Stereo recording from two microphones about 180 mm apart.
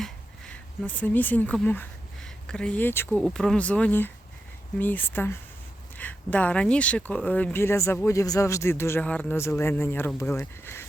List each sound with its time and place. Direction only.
0.0 s a man's voice: 5° left (ahead or behind)